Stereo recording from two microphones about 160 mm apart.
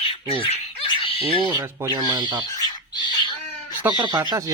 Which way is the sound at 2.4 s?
25° left (ahead or behind).